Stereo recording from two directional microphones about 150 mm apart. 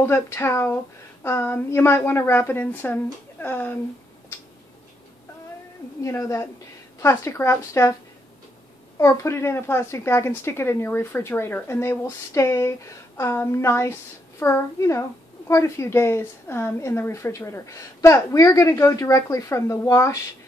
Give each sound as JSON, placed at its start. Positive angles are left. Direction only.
{"t": 0.0, "sound": "a woman's voice", "side_deg": 15}
{"t": 6.0, "sound": "a woman's voice", "side_deg": 20}
{"t": 8.9, "sound": "a woman's voice", "side_deg": 20}